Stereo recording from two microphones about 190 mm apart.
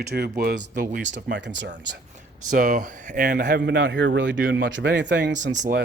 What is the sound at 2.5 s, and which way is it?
Speech, 45° right (ahead or behind).